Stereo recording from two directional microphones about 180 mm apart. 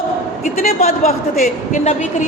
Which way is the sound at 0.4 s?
40° left (ahead or behind).